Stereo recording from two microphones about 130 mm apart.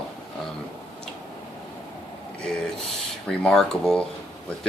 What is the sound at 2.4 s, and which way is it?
Speech, 5° left (ahead or behind).